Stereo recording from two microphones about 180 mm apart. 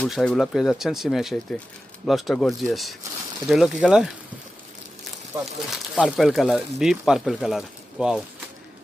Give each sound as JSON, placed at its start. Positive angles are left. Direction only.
{"t": 0.0, "sound": "speech", "side_deg": 0}
{"t": 5.7, "sound": "speech", "side_deg": -5}